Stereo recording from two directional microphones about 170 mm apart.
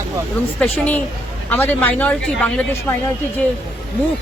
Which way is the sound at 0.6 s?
10° left (ahead or behind).